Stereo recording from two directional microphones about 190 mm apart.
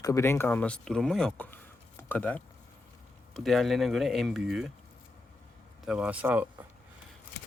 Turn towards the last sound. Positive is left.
turn(degrees=-10)  # may be behind; listen again after turning